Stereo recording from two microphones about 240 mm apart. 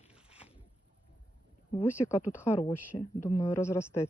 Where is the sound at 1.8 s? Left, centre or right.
Centre.